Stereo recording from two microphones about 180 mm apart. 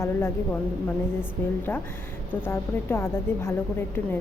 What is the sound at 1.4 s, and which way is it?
A woman's voice, 10° left (ahead or behind).